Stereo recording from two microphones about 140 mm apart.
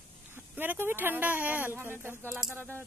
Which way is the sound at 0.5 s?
15° right (ahead or behind).